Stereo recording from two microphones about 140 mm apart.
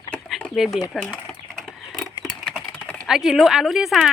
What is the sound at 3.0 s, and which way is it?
Speech, 5° right (ahead or behind).